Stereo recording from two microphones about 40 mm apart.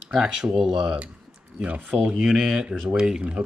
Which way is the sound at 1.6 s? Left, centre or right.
Right.